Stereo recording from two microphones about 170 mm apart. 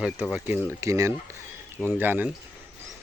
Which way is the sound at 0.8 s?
20° right (ahead or behind).